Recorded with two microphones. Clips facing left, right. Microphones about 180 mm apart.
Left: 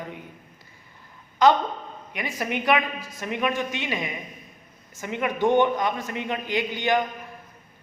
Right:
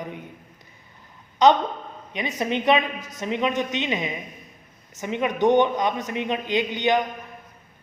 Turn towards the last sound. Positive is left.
turn(degrees=-20)  # may be behind; listen again after turning